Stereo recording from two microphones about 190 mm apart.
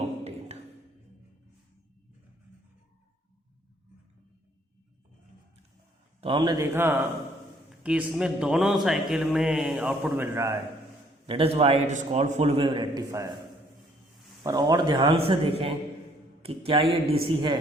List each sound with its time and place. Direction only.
0.0 s a sound: 35° right (ahead or behind)
6.1 s a man's voice: 30° right (ahead or behind)
7.7 s a man's voice: 5° right (ahead or behind)
11.3 s a man's voice: 30° right (ahead or behind)
14.4 s a man's voice: 20° right (ahead or behind)